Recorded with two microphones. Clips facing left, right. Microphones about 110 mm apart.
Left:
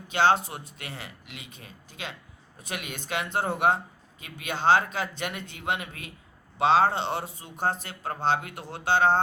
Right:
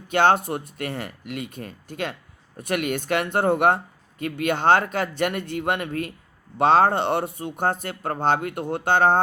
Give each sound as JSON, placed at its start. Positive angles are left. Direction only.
{"t": 0.1, "sound": "speech", "side_deg": -50}